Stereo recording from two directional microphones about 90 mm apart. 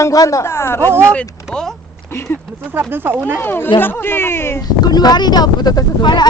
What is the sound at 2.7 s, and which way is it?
Speech, 25° right (ahead or behind).